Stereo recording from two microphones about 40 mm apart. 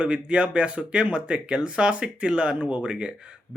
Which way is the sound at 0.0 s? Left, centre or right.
Right.